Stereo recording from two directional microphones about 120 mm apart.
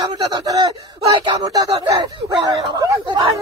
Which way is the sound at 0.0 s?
35° right (ahead or behind).